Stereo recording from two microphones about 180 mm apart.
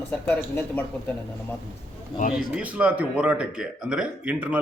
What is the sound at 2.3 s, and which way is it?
Speech, 5° right (ahead or behind).